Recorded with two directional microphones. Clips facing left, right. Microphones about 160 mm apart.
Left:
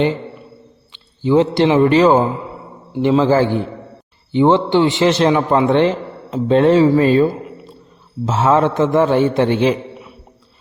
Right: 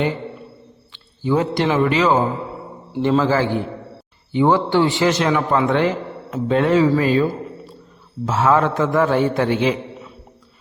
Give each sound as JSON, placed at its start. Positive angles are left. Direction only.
{"t": 0.9, "sound": "a man's voice", "side_deg": 20}
{"t": 3.0, "sound": "a man's voice", "side_deg": 20}